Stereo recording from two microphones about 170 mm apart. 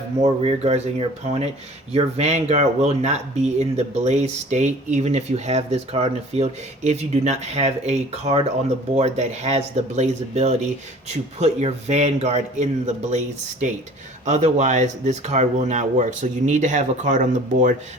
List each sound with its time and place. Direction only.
0.2 s speech: 40° right (ahead or behind)